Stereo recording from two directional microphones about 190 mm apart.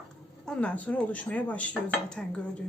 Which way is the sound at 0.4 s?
5° left (ahead or behind).